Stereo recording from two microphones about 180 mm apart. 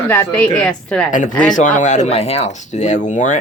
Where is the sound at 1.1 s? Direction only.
45° left (ahead or behind).